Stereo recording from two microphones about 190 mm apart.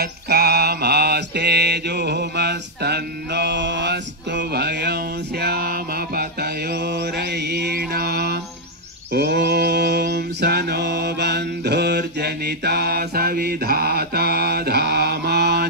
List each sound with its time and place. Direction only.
0.0 s mantra: 55° right (ahead or behind)